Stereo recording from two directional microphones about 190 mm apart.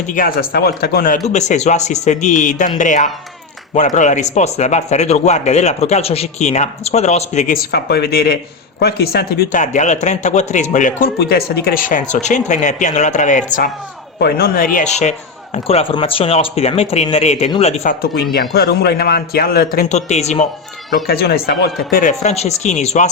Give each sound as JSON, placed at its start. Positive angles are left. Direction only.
{"t": 0.1, "sound": "speech", "side_deg": 50}
{"t": 1.3, "sound": "speech", "side_deg": 35}
{"t": 14.2, "sound": "speech", "side_deg": 55}
{"t": 18.0, "sound": "a man's voice", "side_deg": 55}
{"t": 19.9, "sound": "speech", "side_deg": 35}
{"t": 21.1, "sound": "speech", "side_deg": 55}
{"t": 22.2, "sound": "speech", "side_deg": 35}